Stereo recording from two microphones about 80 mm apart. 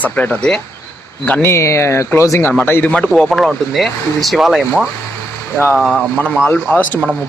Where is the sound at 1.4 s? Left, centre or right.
Left.